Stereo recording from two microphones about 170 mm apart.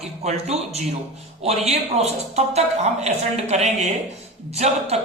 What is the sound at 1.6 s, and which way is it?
Speech, 40° right (ahead or behind).